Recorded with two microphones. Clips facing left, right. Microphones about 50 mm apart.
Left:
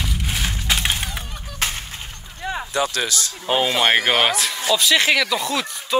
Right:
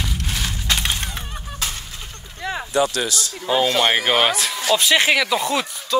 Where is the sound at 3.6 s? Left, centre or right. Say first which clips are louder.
Left 1 dB; centre.